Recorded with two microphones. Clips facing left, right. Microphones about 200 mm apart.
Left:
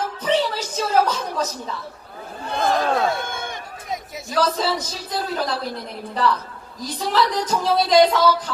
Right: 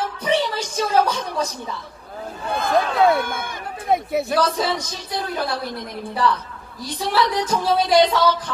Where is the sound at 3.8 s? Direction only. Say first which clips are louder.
Right 13 dB; 60° right (ahead or behind).